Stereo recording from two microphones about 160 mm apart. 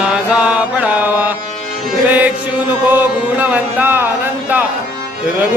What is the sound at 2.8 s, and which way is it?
Mantra, 10° right (ahead or behind).